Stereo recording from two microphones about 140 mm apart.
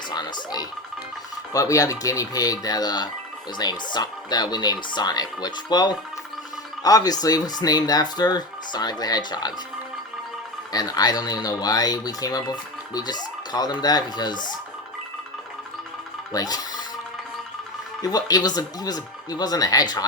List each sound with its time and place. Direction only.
0.1 s speech: 30° left (ahead or behind)
10.7 s speech: 25° left (ahead or behind)
16.3 s speech: 25° left (ahead or behind)
18.0 s speech: 25° left (ahead or behind)